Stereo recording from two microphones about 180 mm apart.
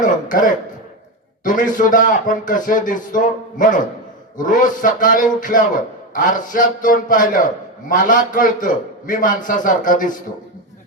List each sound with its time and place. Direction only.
0.0 s a man's voice: 50° left (ahead or behind)